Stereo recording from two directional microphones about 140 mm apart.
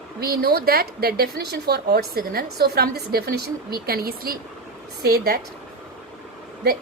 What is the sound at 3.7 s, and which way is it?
A woman's voice, 90° right.